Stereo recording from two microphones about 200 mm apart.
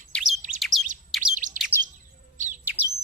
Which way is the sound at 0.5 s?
40° right (ahead or behind).